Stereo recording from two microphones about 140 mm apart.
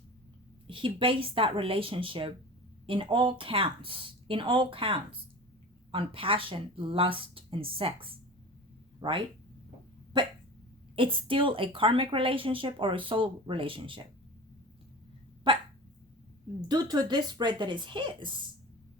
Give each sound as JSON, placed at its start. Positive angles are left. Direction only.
{"t": 0.7, "sound": "a woman's voice", "side_deg": -40}
{"t": 15.5, "sound": "dog", "side_deg": -35}
{"t": 16.6, "sound": "a woman's voice", "side_deg": -30}